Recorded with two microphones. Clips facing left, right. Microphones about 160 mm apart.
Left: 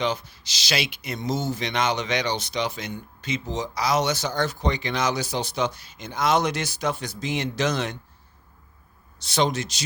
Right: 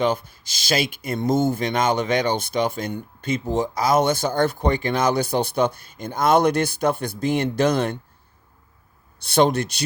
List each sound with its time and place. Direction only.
0.0 s speech: 50° right (ahead or behind)
9.2 s speech: 55° right (ahead or behind)